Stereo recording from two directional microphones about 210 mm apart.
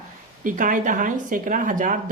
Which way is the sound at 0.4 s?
40° right (ahead or behind).